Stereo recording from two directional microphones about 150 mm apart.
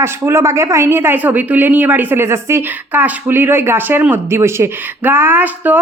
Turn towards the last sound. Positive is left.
turn(degrees=-10)  # may be behind; listen again after turning